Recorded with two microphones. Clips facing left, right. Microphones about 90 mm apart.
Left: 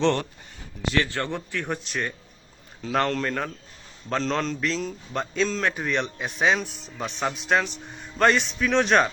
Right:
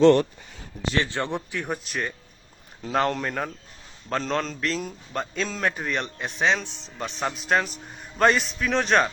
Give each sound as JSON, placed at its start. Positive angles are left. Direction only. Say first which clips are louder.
{"t": 1.0, "sound": "speech", "louder": "right 1 dB", "side_deg": -20}
{"t": 1.6, "sound": "a man's voice", "louder": "even", "side_deg": 0}
{"t": 2.8, "sound": "a man's voice", "louder": "even", "side_deg": -15}